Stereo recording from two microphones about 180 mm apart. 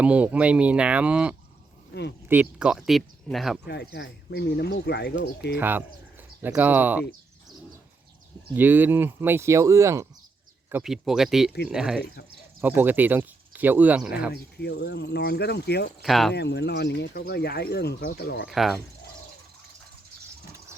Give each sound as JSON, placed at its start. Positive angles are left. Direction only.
{"t": 0.0, "sound": "speech", "side_deg": -5}
{"t": 1.9, "sound": "speech", "side_deg": 70}
{"t": 2.3, "sound": "speech", "side_deg": -5}
{"t": 3.7, "sound": "speech", "side_deg": 70}
{"t": 5.5, "sound": "speech", "side_deg": -10}
{"t": 8.5, "sound": "speech", "side_deg": -10}
{"t": 14.3, "sound": "speech", "side_deg": 65}
{"t": 16.0, "sound": "speech", "side_deg": 0}
{"t": 16.3, "sound": "speech", "side_deg": 70}
{"t": 18.4, "sound": "speech", "side_deg": 0}